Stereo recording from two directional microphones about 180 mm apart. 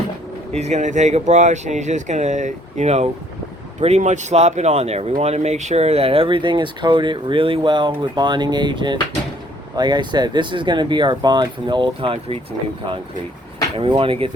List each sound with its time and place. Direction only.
0.5 s speech: 40° right (ahead or behind)
13.7 s speech: 30° right (ahead or behind)